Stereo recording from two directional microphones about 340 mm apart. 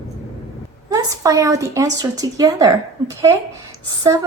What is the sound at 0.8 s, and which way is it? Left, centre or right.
A woman's voice, centre.